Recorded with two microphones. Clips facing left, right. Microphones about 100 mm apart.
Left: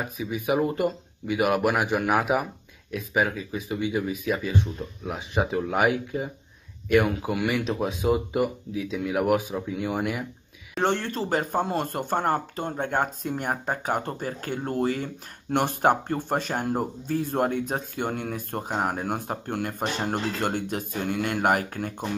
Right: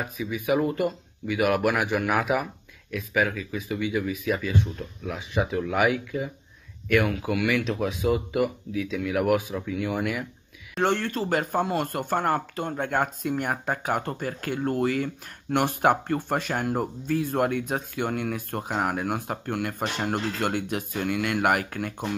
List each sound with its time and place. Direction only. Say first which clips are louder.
0.2 s a man's voice: even; 30° left (ahead or behind)